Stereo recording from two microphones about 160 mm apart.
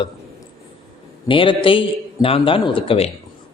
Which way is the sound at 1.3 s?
35° left (ahead or behind).